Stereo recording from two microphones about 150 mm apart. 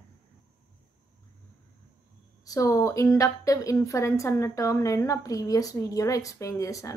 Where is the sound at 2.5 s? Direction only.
20° left (ahead or behind).